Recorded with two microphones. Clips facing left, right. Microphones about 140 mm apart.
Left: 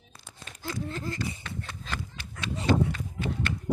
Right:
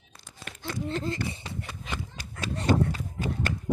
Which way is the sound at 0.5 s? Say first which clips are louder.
Right 8 dB; 65° right (ahead or behind).